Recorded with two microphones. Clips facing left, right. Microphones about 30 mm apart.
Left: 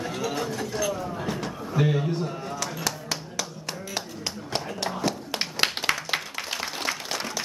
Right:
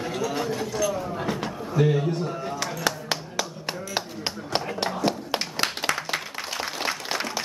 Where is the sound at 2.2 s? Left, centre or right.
Centre.